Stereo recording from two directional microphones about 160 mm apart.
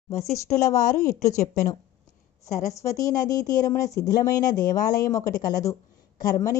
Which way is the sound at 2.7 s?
20° left (ahead or behind).